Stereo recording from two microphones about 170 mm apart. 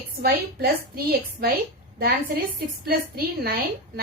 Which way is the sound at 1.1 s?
60° right (ahead or behind).